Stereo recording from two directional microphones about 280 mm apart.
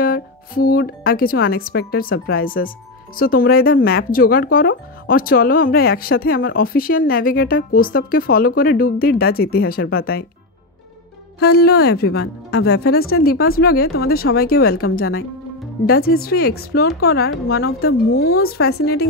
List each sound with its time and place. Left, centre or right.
0.0 s speech: left
11.4 s speech: left
16.1 s speech: left